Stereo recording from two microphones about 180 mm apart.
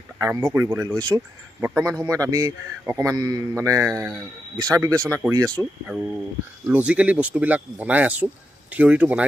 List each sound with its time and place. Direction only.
0.2 s a man's voice: 15° right (ahead or behind)